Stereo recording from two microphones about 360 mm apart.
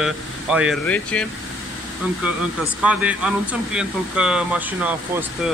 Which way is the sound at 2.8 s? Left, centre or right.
Centre.